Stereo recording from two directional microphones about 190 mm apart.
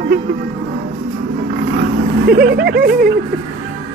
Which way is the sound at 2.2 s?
55° right (ahead or behind).